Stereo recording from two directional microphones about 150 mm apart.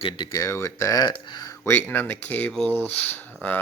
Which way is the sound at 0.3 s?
20° left (ahead or behind).